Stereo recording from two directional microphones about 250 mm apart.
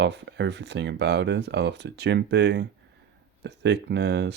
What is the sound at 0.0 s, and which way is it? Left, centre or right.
Speech, right.